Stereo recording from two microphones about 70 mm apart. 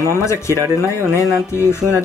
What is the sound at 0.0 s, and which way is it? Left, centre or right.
Speech, left.